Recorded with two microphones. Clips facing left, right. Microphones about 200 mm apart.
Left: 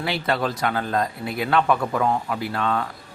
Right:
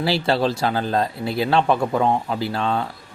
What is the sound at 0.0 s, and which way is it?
A man's voice, 30° right (ahead or behind).